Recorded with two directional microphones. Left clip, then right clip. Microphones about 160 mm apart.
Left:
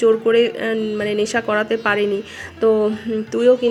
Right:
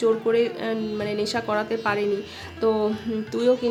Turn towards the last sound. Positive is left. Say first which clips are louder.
# left 7 dB
turn(degrees=10)  # may be behind; listen again after turning